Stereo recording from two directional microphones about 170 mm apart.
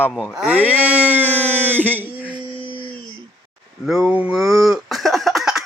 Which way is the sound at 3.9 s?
5° right (ahead or behind).